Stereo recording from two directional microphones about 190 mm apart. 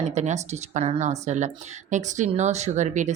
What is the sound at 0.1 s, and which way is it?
Speech, 40° right (ahead or behind).